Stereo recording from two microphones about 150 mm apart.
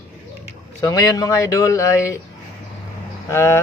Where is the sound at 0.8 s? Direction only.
25° left (ahead or behind).